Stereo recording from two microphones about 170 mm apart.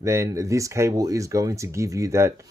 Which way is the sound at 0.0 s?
15° right (ahead or behind).